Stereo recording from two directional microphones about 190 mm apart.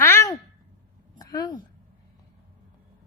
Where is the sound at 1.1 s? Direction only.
20° left (ahead or behind).